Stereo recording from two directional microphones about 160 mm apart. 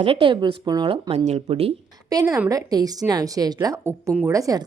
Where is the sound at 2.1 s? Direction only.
25° right (ahead or behind).